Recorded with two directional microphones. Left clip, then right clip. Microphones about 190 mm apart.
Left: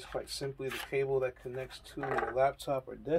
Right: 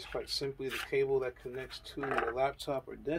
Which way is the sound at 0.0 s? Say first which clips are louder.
Right 2 dB; 15° left (ahead or behind).